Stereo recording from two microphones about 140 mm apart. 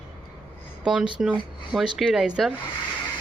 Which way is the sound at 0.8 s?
5° right (ahead or behind).